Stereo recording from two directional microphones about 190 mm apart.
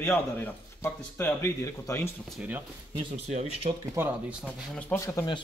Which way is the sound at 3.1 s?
35° right (ahead or behind).